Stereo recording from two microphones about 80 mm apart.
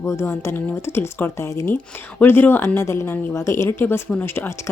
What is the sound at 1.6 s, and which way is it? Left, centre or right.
Speech, left.